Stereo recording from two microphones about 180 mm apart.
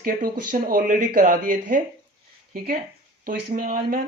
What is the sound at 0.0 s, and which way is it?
Speech, 55° right (ahead or behind).